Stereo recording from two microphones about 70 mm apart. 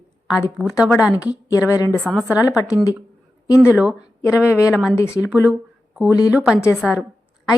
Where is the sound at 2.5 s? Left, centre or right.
Left.